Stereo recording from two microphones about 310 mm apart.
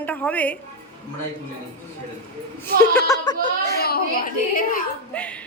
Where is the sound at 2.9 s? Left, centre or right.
Centre.